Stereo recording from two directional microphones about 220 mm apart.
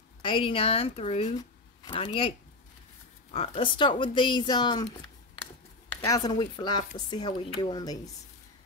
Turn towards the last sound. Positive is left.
turn(degrees=20)  # may be behind; listen again after turning